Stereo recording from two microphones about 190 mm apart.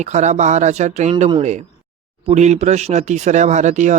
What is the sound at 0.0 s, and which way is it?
Speech, 35° right (ahead or behind).